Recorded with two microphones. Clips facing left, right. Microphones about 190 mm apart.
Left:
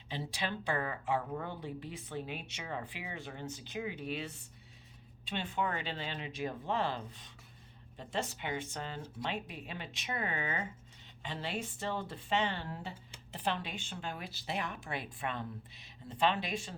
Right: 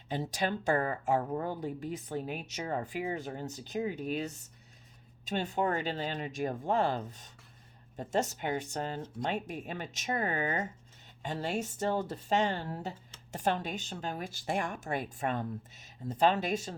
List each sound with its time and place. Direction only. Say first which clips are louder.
0.1 s a woman's voice: right 6 dB; 45° right (ahead or behind)